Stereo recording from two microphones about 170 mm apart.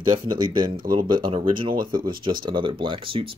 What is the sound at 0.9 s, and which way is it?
Speech, 25° right (ahead or behind).